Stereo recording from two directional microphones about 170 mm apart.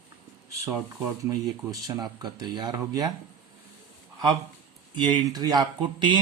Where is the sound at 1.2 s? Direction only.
20° right (ahead or behind).